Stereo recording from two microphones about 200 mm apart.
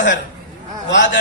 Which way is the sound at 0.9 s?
65° left (ahead or behind).